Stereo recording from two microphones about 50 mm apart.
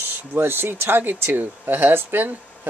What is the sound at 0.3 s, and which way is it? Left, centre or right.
Speech, right.